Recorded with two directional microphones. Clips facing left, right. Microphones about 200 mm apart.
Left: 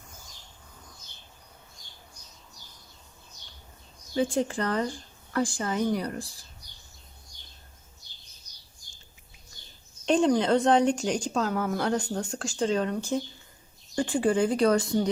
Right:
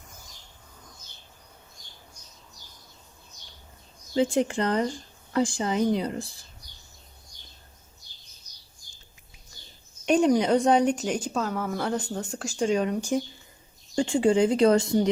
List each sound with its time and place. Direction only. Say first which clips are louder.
4.1 s speech: right 3 dB; 20° right (ahead or behind)
10.1 s speech: right 2 dB; 10° right (ahead or behind)